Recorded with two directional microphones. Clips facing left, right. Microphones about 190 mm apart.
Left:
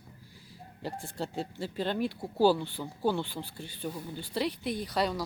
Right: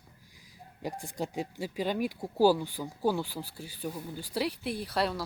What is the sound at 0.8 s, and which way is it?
Speech, 15° right (ahead or behind).